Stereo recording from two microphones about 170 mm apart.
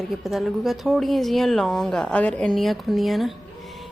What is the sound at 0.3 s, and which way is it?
Speech, centre (ahead or behind).